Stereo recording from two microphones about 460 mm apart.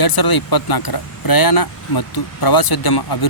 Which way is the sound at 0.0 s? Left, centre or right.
Left.